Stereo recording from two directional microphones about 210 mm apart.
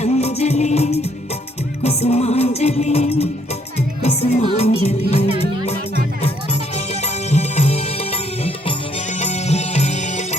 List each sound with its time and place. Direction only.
0.0 s music: 30° left (ahead or behind)
6.2 s music: 30° left (ahead or behind)